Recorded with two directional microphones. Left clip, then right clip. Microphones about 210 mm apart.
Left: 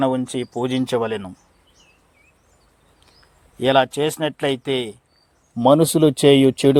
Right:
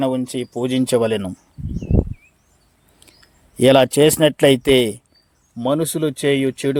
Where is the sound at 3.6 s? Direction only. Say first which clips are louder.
Right 5 dB; 50° right (ahead or behind).